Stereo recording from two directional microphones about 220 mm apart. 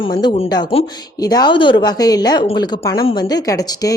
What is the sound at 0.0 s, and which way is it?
Speech, 20° left (ahead or behind).